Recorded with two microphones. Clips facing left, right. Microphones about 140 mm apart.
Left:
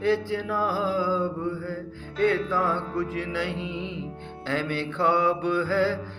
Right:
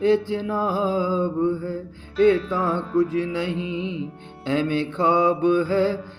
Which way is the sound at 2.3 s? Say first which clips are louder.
Right 3 dB; 20° right (ahead or behind).